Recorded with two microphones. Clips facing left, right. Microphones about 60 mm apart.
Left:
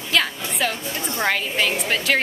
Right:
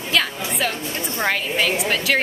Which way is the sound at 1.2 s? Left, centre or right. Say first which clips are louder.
Even; centre.